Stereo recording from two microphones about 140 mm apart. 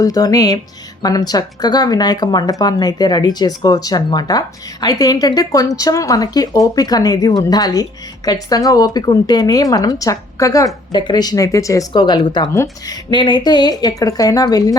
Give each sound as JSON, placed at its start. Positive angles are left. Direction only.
{"t": 0.0, "sound": "speech", "side_deg": 25}